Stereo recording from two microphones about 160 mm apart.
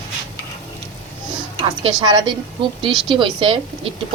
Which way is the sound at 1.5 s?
30° right (ahead or behind).